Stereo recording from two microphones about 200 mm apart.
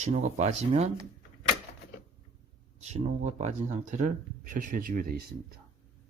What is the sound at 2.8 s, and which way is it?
Speech, 35° right (ahead or behind).